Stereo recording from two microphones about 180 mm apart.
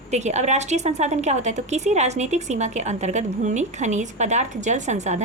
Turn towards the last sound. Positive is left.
turn(degrees=-40)  # may be behind; listen again after turning